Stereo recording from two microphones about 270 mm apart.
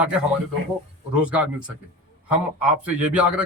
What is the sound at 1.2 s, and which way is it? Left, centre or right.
Speech, centre.